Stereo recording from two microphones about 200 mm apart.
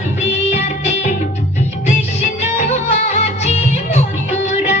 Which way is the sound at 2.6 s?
35° left (ahead or behind).